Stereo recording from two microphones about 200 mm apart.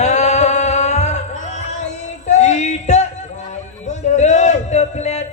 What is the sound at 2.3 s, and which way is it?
Music, 35° left (ahead or behind).